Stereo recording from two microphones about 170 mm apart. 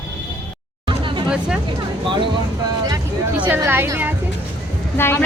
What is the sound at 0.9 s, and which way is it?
Hubbub, 30° right (ahead or behind).